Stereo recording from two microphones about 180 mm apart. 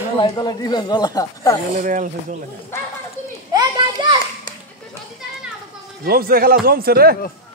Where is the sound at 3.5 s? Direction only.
25° right (ahead or behind).